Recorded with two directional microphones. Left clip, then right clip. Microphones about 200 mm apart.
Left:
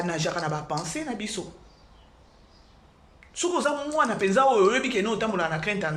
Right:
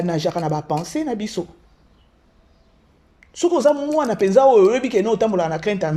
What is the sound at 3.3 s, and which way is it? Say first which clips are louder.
Speech: right 9 dB; 30° right (ahead or behind).